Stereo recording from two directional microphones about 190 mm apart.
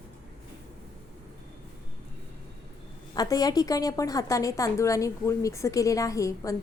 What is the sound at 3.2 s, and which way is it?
A woman's voice, 20° left (ahead or behind).